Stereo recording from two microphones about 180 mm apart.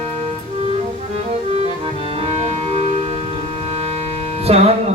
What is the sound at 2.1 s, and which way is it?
Music, 35° right (ahead or behind).